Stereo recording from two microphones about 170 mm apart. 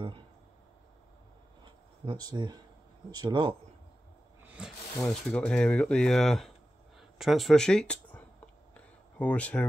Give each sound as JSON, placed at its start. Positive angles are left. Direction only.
{"t": 1.6, "sound": "a sound", "side_deg": -25}
{"t": 3.1, "sound": "speech", "side_deg": -25}
{"t": 4.5, "sound": "speech", "side_deg": -5}
{"t": 9.2, "sound": "speech", "side_deg": 10}